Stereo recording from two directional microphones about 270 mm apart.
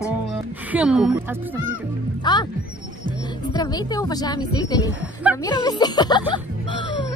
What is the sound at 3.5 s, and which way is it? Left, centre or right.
Speech, centre.